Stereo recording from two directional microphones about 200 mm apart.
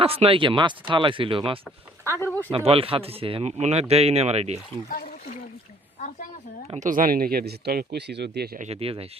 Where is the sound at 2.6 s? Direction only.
30° right (ahead or behind).